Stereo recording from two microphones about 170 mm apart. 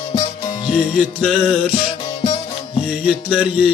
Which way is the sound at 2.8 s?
5° right (ahead or behind).